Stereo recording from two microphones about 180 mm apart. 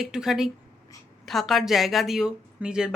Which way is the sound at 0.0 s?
Centre (ahead or behind).